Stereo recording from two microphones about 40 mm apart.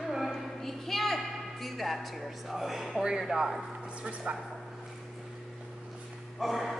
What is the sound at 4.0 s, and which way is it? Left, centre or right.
Speech, right.